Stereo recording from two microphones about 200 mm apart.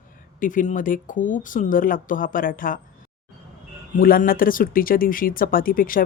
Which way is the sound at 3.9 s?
45° left (ahead or behind).